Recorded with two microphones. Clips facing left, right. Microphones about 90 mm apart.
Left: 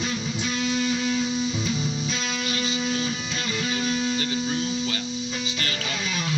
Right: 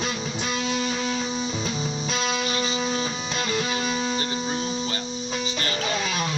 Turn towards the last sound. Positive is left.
turn(degrees=-30)  # may be behind; listen again after turning